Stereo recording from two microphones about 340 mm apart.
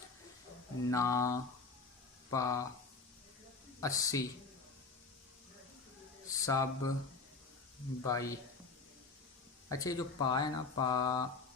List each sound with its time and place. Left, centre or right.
0.9 s speech: centre
3.8 s speech: centre
6.2 s speech: centre
8.0 s speech: centre
9.6 s speech: centre